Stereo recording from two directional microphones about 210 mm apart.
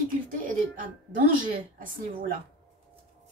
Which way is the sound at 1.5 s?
40° right (ahead or behind).